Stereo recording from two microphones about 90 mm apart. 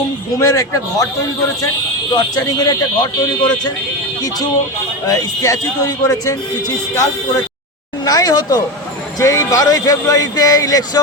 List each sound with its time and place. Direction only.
0.3 s speech: 35° left (ahead or behind)
2.1 s speech: 45° left (ahead or behind)
5.0 s speech: 40° left (ahead or behind)